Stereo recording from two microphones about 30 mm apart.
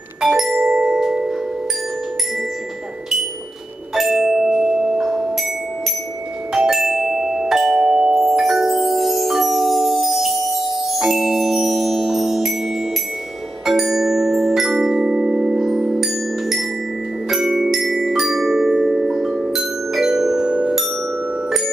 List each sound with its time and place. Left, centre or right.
0.2 s music: centre
3.9 s music: centre
4.7 s marimba: centre
6.7 s marimba: centre
7.7 s chime: right
8.1 s mallet percussion: centre
13.7 s marimba: centre
17.3 s glockenspiel: centre
17.9 s marimba: centre
20.4 s marimba: right